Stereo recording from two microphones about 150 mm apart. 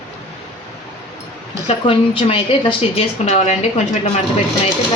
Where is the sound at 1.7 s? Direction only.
35° left (ahead or behind).